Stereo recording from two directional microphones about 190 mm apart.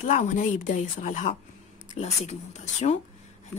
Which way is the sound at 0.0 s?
40° left (ahead or behind).